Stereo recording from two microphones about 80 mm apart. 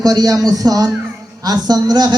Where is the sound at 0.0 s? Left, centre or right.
Right.